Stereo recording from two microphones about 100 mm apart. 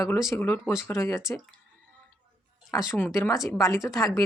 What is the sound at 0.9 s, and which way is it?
Speech, 30° left (ahead or behind).